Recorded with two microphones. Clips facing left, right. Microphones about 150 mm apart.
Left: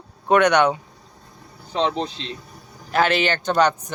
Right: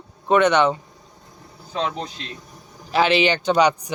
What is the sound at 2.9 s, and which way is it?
Speech, 10° right (ahead or behind).